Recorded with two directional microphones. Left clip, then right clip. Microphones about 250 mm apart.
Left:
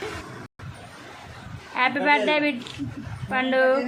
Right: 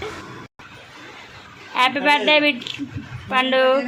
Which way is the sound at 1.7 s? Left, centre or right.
Centre.